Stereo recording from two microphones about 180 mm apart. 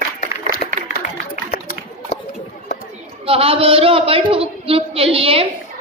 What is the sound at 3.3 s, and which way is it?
A woman's voice, 30° right (ahead or behind).